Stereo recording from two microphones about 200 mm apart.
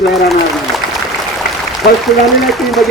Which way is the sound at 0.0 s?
Centre (ahead or behind).